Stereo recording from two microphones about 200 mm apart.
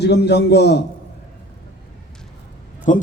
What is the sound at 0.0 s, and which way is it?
Speech, 55° left (ahead or behind).